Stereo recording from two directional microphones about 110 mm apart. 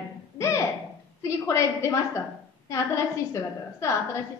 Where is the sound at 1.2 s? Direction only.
25° left (ahead or behind).